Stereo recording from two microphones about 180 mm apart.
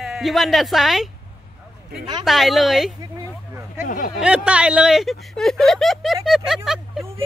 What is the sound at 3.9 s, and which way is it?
Speech, 50° left (ahead or behind).